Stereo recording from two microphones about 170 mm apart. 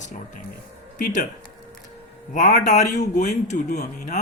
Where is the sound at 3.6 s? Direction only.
70° left (ahead or behind).